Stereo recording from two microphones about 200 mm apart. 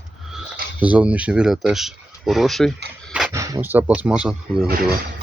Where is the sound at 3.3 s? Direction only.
15° right (ahead or behind).